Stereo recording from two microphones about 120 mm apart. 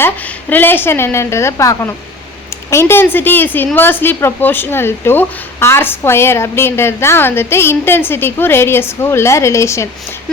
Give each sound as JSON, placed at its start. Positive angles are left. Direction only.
{"t": 0.5, "sound": "a woman's voice", "side_deg": 15}